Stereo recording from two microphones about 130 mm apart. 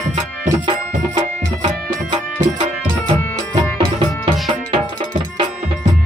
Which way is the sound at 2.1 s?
35° right (ahead or behind).